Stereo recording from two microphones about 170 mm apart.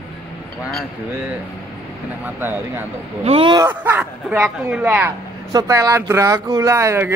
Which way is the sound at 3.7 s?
10° right (ahead or behind).